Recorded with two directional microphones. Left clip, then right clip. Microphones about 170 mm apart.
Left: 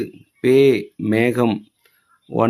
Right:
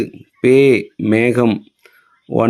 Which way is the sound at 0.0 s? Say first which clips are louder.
Right 5 dB; 15° right (ahead or behind).